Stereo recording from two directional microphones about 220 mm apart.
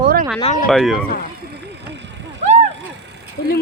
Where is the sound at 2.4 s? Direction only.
30° right (ahead or behind).